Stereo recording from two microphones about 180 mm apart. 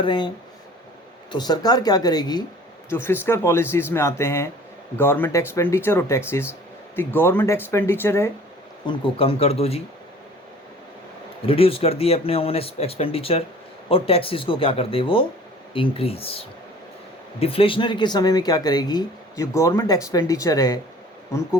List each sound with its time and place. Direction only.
0.0 s speech: 25° left (ahead or behind)
1.3 s speech: 25° left (ahead or behind)
8.9 s speech: 30° left (ahead or behind)
11.4 s speech: 30° left (ahead or behind)